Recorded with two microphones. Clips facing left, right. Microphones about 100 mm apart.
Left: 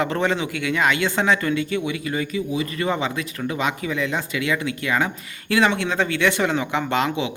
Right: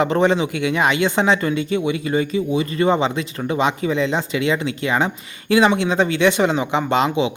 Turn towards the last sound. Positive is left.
turn(degrees=-20)  # may be behind; listen again after turning